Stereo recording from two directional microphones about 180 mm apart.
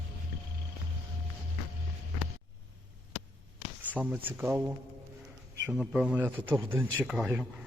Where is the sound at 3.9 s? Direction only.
10° right (ahead or behind).